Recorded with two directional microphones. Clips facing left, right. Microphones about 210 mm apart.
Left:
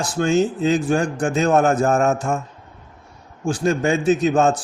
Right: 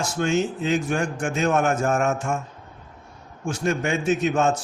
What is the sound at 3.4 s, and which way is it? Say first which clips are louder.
A man's voice: left 5 dB; 35° left (ahead or behind).